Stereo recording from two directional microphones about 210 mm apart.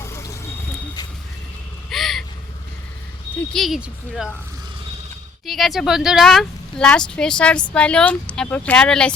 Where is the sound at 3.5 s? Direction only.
Centre (ahead or behind).